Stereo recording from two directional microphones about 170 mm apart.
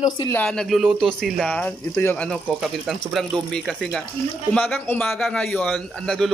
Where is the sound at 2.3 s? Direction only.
Centre (ahead or behind).